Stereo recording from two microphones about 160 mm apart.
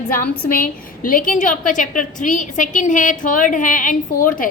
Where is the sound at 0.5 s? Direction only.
60° left (ahead or behind).